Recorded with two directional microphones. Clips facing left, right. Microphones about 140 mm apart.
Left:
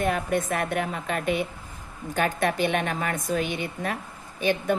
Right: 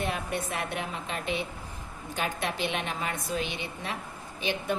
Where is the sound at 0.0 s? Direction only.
50° left (ahead or behind).